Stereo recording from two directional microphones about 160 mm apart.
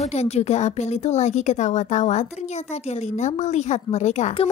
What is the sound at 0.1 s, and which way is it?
A woman's voice, 45° left (ahead or behind).